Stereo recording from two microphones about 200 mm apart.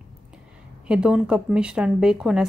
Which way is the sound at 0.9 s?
5° right (ahead or behind).